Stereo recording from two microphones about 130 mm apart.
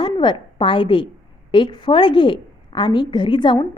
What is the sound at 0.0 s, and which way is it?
A woman's voice, 35° left (ahead or behind).